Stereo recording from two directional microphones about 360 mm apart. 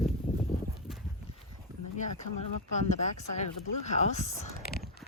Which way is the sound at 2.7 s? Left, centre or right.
Centre.